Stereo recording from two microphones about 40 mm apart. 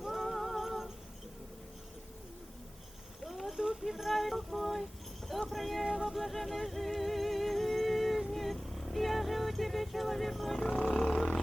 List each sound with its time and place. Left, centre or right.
0.0 s music: centre
3.2 s a sound: centre
5.3 s speech: centre
6.1 s music: centre